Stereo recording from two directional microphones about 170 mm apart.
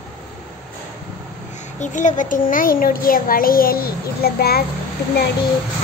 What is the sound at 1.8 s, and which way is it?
A child's voice, 45° left (ahead or behind).